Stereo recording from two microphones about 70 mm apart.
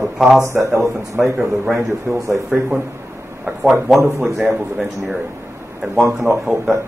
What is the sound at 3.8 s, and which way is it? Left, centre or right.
Speech, centre.